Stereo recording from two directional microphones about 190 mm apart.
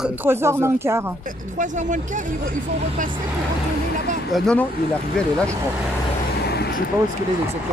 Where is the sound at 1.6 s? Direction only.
40° right (ahead or behind).